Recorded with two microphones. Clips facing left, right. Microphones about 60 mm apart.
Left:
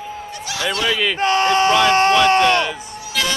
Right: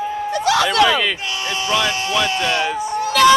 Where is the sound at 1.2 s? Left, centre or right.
Left.